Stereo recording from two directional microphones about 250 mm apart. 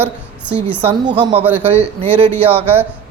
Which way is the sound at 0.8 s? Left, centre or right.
Centre.